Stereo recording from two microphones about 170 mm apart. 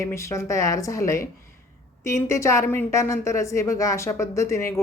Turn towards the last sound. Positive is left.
turn(degrees=15)  # may be behind; listen again after turning